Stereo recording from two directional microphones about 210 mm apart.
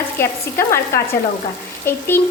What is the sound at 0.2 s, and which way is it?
Speech, 10° left (ahead or behind).